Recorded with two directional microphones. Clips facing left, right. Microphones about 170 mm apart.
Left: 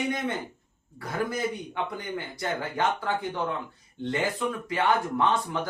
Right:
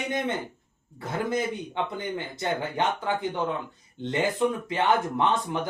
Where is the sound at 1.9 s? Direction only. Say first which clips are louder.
Right 2 dB; 20° right (ahead or behind).